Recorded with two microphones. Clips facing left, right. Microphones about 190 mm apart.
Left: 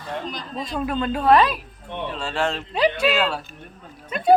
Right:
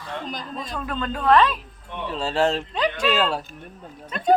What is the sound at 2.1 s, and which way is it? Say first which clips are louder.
Speech: right 5 dB; 35° right (ahead or behind).